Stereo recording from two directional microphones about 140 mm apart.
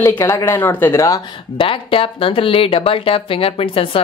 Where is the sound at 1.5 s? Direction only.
40° left (ahead or behind).